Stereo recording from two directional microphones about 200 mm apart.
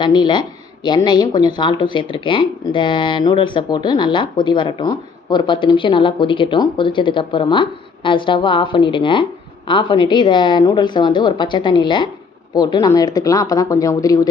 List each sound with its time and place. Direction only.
0.0 s speech: 20° left (ahead or behind)